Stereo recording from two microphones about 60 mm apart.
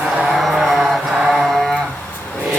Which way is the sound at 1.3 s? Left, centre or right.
Centre.